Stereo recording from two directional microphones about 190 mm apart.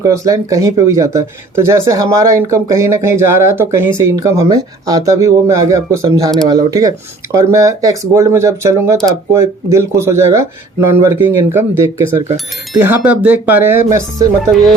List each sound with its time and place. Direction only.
0.0 s speech: 15° right (ahead or behind)